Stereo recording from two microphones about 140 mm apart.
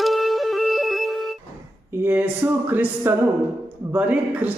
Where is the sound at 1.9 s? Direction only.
15° right (ahead or behind).